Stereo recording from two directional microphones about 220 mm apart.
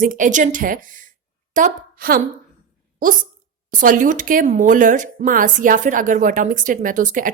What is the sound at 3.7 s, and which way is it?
A woman's voice, 40° right (ahead or behind).